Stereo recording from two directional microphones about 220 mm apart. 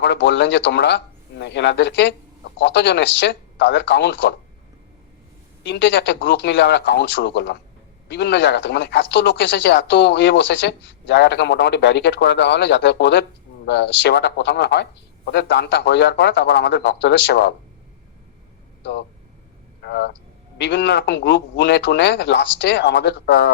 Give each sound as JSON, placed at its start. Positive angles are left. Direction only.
{"t": 0.0, "sound": "speech", "side_deg": 55}
{"t": 5.6, "sound": "speech", "side_deg": 55}
{"t": 18.8, "sound": "speech", "side_deg": 50}